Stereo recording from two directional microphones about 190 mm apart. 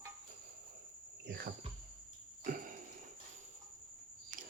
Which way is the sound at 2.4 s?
45° right (ahead or behind).